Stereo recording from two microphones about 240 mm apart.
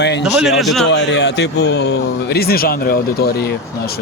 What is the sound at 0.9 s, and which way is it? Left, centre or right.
Speech, left.